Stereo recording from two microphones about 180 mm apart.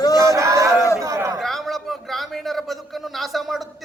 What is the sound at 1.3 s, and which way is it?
A man's voice, centre (ahead or behind).